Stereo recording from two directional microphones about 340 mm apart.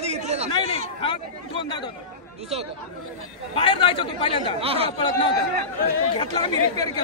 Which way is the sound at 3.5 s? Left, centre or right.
Centre.